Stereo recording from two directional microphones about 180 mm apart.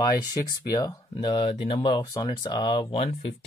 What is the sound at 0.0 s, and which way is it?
Speech, 20° left (ahead or behind).